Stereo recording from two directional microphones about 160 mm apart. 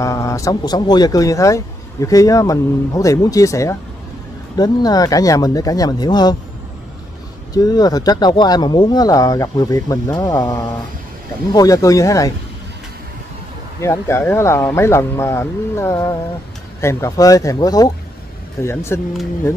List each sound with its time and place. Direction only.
0.0 s speech: 20° left (ahead or behind)
7.5 s speech: 25° left (ahead or behind)
13.7 s speech: 15° left (ahead or behind)